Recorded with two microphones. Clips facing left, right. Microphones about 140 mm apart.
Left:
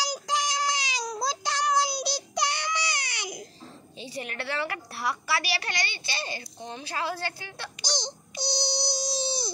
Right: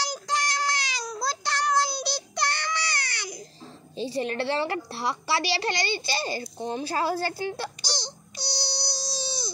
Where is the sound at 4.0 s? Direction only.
30° right (ahead or behind).